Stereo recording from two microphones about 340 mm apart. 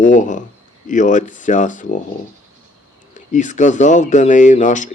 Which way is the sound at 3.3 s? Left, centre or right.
Left.